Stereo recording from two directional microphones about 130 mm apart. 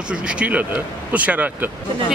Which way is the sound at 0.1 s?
10° right (ahead or behind).